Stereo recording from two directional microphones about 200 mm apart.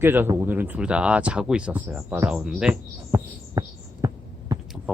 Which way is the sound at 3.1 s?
15° right (ahead or behind).